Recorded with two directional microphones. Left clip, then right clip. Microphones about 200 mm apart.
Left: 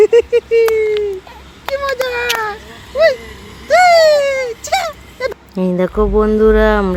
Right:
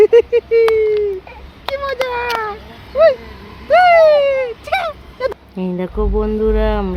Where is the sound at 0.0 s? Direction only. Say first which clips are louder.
Even; 15° left (ahead or behind).